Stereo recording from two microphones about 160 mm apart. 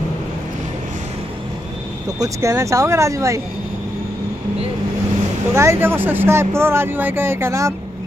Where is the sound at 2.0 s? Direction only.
20° right (ahead or behind).